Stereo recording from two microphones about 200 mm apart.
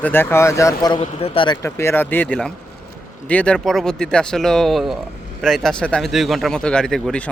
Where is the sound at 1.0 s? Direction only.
30° left (ahead or behind).